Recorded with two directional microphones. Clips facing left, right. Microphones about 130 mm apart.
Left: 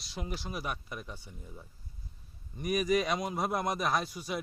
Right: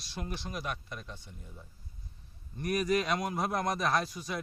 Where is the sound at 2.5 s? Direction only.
5° left (ahead or behind).